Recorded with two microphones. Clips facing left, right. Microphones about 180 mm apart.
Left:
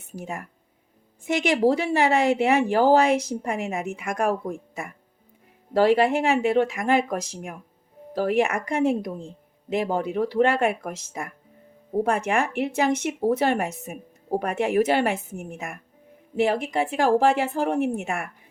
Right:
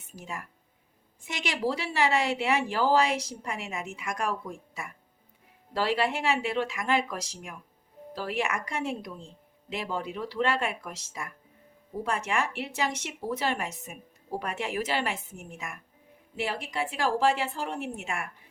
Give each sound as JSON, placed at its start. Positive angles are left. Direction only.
{"t": 0.2, "sound": "speech", "side_deg": 50}